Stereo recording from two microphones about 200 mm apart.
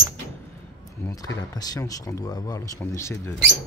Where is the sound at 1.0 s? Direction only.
15° left (ahead or behind).